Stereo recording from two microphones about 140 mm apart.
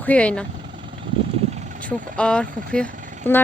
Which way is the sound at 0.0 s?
10° left (ahead or behind).